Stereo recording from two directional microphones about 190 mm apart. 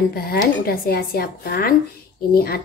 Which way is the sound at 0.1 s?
50° left (ahead or behind).